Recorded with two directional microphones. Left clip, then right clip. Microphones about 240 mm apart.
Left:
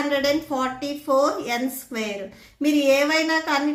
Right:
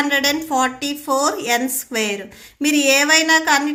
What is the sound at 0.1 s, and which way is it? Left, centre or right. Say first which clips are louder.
A woman's voice: right 4 dB; right.